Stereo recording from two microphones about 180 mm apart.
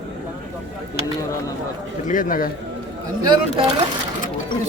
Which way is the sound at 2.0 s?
50° left (ahead or behind).